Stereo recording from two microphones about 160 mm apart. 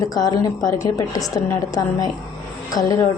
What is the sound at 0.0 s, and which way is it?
A woman's voice, 25° left (ahead or behind).